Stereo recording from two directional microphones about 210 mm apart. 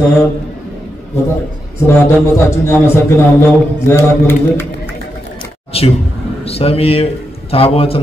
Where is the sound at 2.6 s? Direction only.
10° left (ahead or behind).